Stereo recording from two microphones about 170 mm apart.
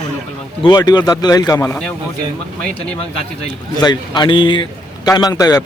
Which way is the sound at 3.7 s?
25° left (ahead or behind).